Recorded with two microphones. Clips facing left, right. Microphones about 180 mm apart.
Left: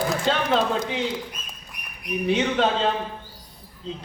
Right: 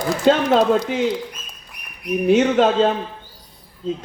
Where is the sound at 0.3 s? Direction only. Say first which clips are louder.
Right 11 dB; 45° right (ahead or behind).